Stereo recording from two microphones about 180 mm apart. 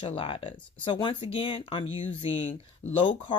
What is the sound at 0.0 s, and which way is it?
Speech, 30° left (ahead or behind).